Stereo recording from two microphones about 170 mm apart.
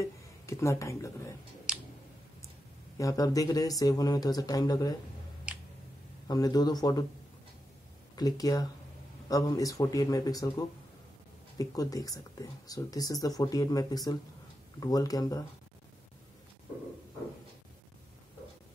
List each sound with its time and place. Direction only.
0.0 s speech: 15° left (ahead or behind)
1.7 s clicking: 5° right (ahead or behind)
3.0 s speech: 20° left (ahead or behind)
5.5 s tick: 5° right (ahead or behind)
6.2 s speech: 20° left (ahead or behind)
8.2 s speech: 20° left (ahead or behind)